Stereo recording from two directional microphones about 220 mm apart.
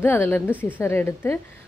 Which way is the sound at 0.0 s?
10° left (ahead or behind).